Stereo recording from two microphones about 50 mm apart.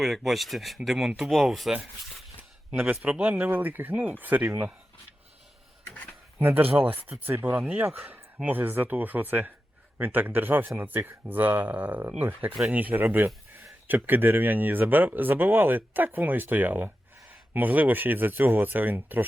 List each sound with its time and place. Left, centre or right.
0.0 s speech: centre
2.8 s a man's voice: right
3.2 s speech: right
6.4 s speech: right
7.6 s speech: right